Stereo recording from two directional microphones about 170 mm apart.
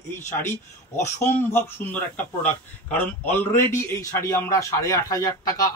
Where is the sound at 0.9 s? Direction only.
45° left (ahead or behind).